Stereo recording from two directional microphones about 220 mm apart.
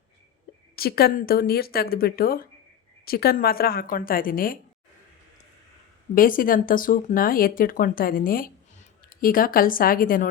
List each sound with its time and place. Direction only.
0.8 s speech: 45° left (ahead or behind)
6.1 s speech: 40° left (ahead or behind)